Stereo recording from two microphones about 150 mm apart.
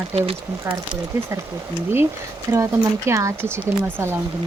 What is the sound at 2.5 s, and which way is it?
Speech, 20° right (ahead or behind).